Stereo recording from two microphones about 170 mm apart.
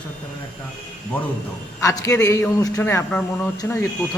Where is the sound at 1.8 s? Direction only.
20° left (ahead or behind).